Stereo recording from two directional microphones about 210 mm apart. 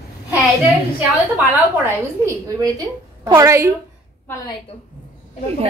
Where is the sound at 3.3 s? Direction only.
15° right (ahead or behind).